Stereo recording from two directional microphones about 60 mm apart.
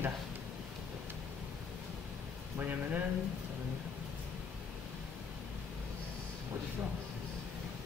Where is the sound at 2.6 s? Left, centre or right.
Right.